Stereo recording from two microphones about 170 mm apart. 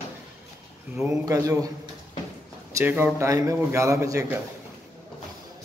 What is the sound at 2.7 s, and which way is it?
A man's voice, 15° right (ahead or behind).